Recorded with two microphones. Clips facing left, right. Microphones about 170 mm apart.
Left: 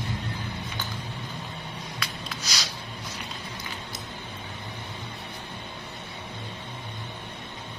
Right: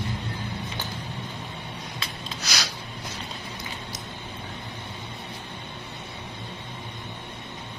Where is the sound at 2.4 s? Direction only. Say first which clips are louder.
Right 5 dB; 65° right (ahead or behind).